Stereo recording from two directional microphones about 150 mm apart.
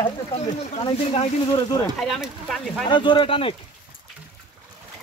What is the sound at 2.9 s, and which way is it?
Speech, 30° left (ahead or behind).